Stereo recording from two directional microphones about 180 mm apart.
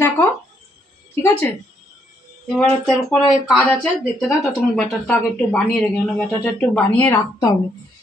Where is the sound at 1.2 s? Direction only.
10° left (ahead or behind).